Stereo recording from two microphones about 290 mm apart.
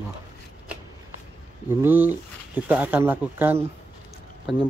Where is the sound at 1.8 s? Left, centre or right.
Centre.